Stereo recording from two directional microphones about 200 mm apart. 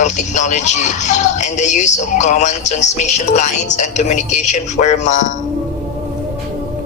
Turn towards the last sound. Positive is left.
turn(degrees=35)  # may be behind; listen again after turning